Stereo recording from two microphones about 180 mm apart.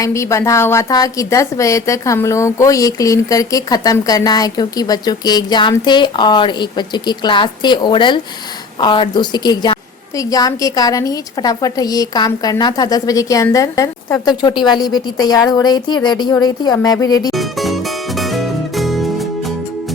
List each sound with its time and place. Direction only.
0.0 s a woman's voice: 15° left (ahead or behind)
17.3 s music: centre (ahead or behind)